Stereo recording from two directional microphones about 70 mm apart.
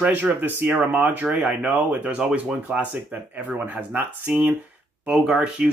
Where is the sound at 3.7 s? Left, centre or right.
Right.